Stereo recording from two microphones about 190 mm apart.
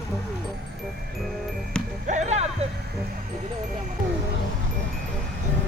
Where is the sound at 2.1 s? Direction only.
40° right (ahead or behind).